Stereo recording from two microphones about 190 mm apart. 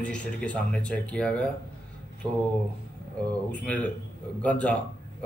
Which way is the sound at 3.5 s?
10° left (ahead or behind).